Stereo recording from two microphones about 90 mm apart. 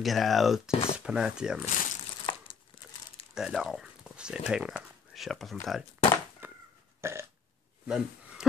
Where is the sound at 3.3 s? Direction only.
5° right (ahead or behind).